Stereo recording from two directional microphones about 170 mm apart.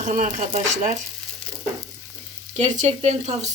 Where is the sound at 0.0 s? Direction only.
50° right (ahead or behind).